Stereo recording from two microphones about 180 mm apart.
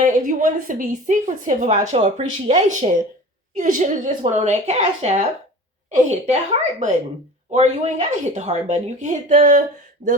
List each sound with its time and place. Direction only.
0.0 s a woman's voice: 45° right (ahead or behind)